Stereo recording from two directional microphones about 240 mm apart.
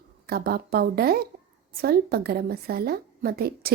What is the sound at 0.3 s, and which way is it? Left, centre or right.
Speech, right.